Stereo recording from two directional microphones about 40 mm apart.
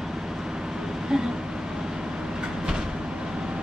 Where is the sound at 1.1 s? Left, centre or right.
Centre.